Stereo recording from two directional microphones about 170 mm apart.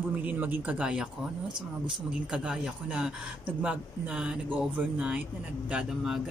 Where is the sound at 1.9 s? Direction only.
5° right (ahead or behind).